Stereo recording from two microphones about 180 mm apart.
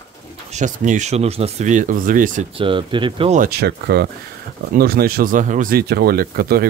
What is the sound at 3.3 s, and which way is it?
Speech, 55° right (ahead or behind).